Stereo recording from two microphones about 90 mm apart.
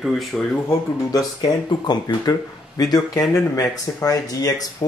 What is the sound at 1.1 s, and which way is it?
Speech, 45° left (ahead or behind).